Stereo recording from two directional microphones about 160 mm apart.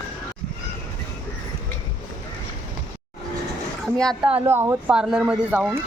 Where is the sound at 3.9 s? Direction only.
5° left (ahead or behind).